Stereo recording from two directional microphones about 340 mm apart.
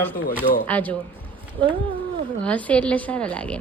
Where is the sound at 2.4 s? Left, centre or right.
Centre.